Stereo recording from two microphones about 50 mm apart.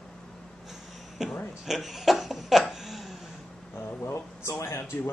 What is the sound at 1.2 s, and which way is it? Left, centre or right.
Speech, centre.